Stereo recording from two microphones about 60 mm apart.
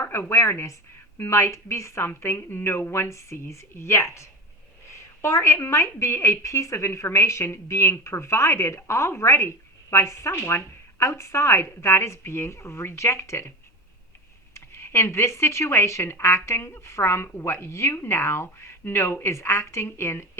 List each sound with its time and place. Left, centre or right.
0.0 s speech: left
14.5 s speech: left